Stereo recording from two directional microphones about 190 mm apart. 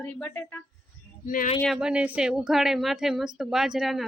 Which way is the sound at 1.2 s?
45° left (ahead or behind).